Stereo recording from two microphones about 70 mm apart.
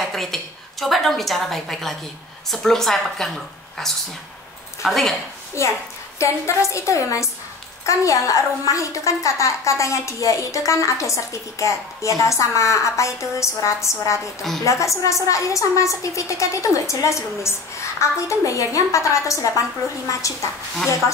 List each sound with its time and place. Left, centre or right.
0.0 s a woman's voice: centre
5.6 s a woman's voice: left